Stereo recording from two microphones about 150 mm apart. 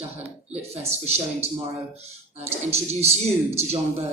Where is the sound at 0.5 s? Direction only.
45° right (ahead or behind).